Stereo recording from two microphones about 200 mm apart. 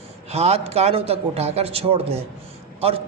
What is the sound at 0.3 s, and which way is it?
A man's voice, 30° right (ahead or behind).